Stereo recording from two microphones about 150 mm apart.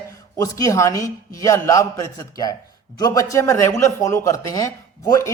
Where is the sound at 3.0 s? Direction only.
20° left (ahead or behind).